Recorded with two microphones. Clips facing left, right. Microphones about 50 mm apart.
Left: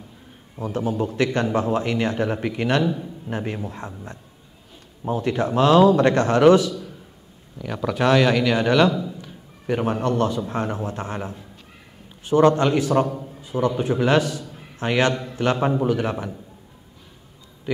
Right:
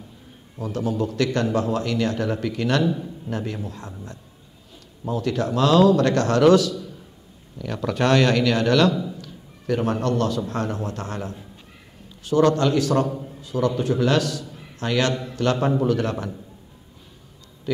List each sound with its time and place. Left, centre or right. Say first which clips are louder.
0.6 s a man's voice: left 1 dB; left
5.0 s a man's voice: left 1 dB; left
7.5 s a man's voice: left 1 dB; centre
14.5 s a sound: left 2 dB; left
15.3 s a man's voice: even; centre